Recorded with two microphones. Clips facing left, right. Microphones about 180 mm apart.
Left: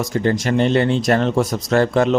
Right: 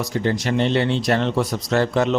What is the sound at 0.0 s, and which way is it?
Speech, 50° left (ahead or behind).